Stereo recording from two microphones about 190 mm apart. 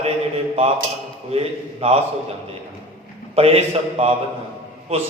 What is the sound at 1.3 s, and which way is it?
Mantra, 30° right (ahead or behind).